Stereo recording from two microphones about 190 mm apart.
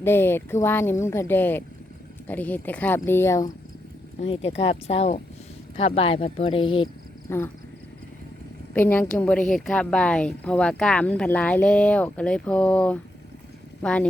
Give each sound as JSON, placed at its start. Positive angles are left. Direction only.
{"t": 0.0, "sound": "speech", "side_deg": 10}
{"t": 4.2, "sound": "speech", "side_deg": 30}
{"t": 7.3, "sound": "speech", "side_deg": 15}
{"t": 8.7, "sound": "speech", "side_deg": 10}